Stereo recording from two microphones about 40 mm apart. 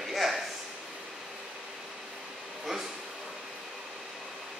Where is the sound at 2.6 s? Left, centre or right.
Centre.